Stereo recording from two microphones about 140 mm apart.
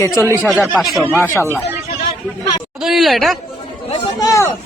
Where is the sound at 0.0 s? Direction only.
20° left (ahead or behind).